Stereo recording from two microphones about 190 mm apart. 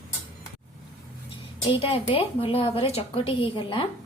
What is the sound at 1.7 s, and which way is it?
A woman's voice, 30° left (ahead or behind).